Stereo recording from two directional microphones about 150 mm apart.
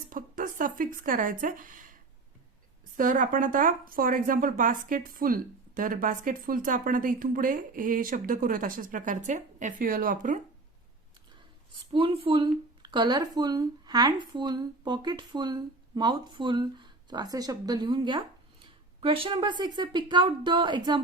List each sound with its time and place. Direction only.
0.1 s speech: 65° right (ahead or behind)
3.0 s speech: 60° right (ahead or behind)
11.7 s speech: 35° right (ahead or behind)